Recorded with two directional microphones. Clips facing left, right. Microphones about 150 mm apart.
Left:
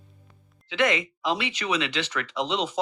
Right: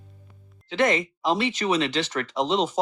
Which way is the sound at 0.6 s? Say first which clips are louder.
Right 2 dB; 40° right (ahead or behind).